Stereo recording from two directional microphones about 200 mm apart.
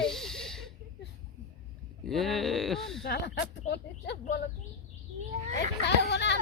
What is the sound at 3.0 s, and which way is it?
Speech, 55° left (ahead or behind).